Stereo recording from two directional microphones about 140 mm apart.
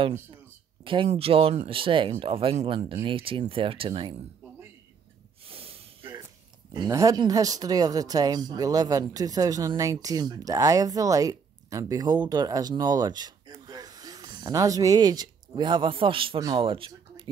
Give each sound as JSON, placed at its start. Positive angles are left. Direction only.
{"t": 0.8, "sound": "speech", "side_deg": -40}
{"t": 5.5, "sound": "snort", "side_deg": -45}
{"t": 6.7, "sound": "speech", "side_deg": -25}